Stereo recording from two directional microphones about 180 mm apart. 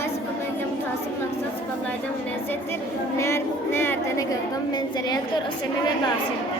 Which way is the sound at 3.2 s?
15° left (ahead or behind).